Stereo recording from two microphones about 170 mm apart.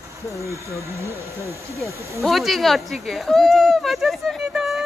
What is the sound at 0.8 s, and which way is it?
Speech, 15° right (ahead or behind).